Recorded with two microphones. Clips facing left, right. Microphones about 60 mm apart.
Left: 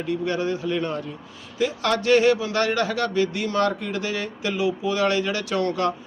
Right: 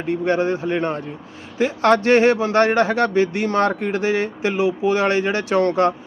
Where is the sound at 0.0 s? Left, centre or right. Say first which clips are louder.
Right 5 dB; right.